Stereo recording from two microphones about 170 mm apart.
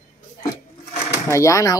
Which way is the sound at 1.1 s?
15° left (ahead or behind).